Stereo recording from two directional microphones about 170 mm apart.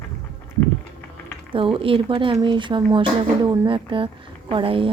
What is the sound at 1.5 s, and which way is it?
Speech, 30° right (ahead or behind).